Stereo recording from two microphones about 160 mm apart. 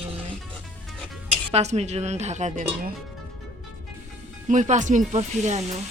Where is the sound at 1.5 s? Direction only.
40° right (ahead or behind).